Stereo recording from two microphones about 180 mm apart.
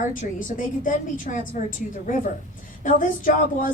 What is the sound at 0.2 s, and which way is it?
A woman's voice, 45° left (ahead or behind).